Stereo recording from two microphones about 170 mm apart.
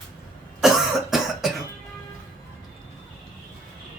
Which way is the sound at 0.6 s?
Centre (ahead or behind).